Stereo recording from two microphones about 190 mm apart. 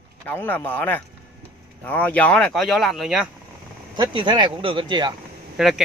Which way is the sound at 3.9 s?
25° right (ahead or behind).